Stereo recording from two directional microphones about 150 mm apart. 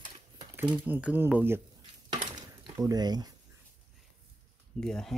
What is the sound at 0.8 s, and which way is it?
Speech, 10° right (ahead or behind).